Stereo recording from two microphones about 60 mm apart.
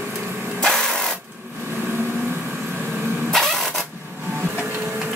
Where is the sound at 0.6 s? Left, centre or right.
Centre.